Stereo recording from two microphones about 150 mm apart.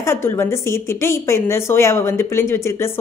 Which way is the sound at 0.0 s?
20° left (ahead or behind).